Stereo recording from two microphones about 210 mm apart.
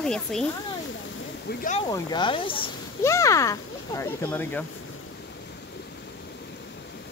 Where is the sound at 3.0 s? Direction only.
15° left (ahead or behind).